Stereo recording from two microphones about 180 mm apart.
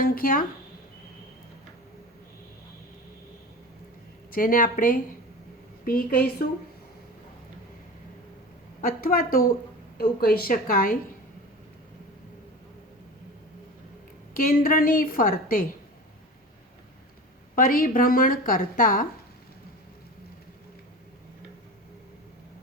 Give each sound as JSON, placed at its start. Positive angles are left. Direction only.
{"t": 0.0, "sound": "a woman's voice", "side_deg": 55}
{"t": 4.3, "sound": "a woman's voice", "side_deg": 50}
{"t": 8.8, "sound": "a woman's voice", "side_deg": 55}
{"t": 14.3, "sound": "a woman's voice", "side_deg": 55}
{"t": 17.5, "sound": "a woman's voice", "side_deg": 50}